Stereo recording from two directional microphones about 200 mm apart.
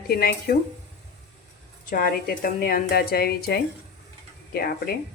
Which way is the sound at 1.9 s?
45° left (ahead or behind).